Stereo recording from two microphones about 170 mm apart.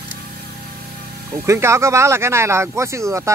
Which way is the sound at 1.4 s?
15° right (ahead or behind).